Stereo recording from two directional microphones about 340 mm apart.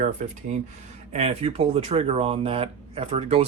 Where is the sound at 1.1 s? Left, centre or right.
Centre.